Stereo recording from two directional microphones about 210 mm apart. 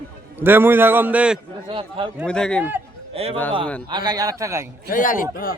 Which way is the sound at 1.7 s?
25° right (ahead or behind).